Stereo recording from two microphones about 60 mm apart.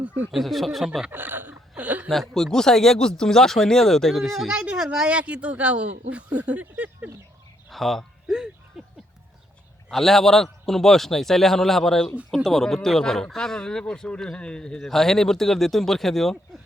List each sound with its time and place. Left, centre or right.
0.0 s speech: right
0.3 s a man's voice: centre
1.1 s a sound: right
2.0 s speech: centre
4.8 s speech: centre
5.0 s speech: right
7.7 s speech: centre
8.8 s a sound: centre
9.9 s a man's voice: centre